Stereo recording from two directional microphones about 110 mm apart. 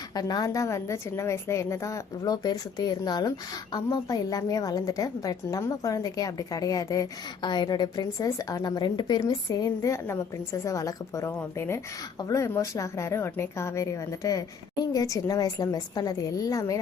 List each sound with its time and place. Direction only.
0.1 s a woman's voice: 35° left (ahead or behind)